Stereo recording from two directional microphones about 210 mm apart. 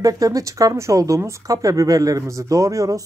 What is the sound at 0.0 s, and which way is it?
Speech, 15° right (ahead or behind).